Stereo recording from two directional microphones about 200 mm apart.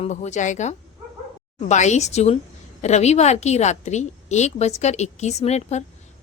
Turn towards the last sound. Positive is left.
turn(degrees=35)  # may be behind; listen again after turning